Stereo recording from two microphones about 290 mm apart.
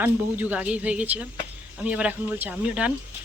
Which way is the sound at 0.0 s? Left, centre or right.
Centre.